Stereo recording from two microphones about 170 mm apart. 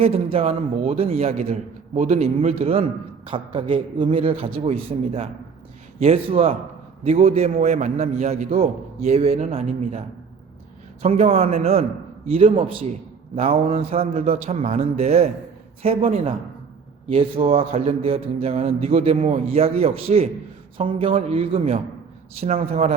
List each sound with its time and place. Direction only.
0.0 s a man's voice: 35° right (ahead or behind)
11.0 s a man's voice: 35° right (ahead or behind)